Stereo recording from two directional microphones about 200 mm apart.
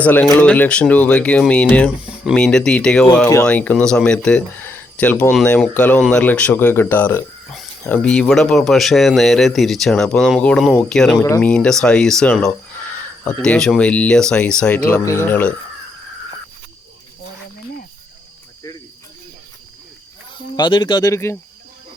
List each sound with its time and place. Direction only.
0.0 s speech: 10° left (ahead or behind)
20.6 s speech: 20° left (ahead or behind)